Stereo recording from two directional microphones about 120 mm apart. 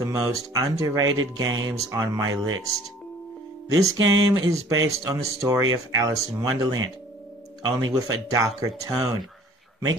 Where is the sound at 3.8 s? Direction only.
25° right (ahead or behind).